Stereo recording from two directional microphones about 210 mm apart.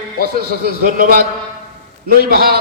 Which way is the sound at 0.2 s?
45° right (ahead or behind).